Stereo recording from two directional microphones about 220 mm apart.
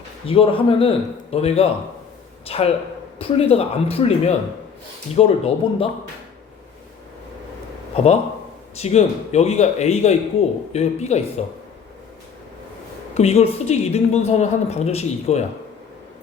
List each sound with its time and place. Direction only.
0.3 s a woman's voice: 25° left (ahead or behind)
7.9 s a woman's voice: 30° left (ahead or behind)
13.1 s a woman's voice: 30° left (ahead or behind)